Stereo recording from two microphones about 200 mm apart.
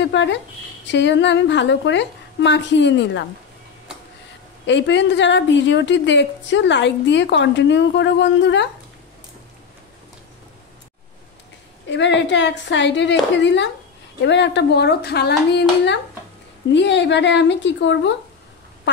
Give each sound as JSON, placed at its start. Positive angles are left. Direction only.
{"t": 0.1, "sound": "a woman's voice", "side_deg": 65}
{"t": 4.6, "sound": "a woman's voice", "side_deg": 65}
{"t": 11.9, "sound": "a woman's voice", "side_deg": 65}